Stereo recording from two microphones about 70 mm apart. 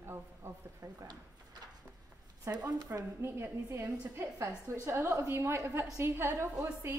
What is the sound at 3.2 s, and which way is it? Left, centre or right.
A woman's voice, right.